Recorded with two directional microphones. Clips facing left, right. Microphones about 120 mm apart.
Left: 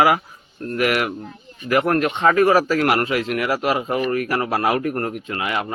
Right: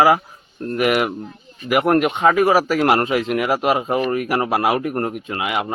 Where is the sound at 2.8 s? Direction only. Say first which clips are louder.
Right 2 dB; 25° right (ahead or behind).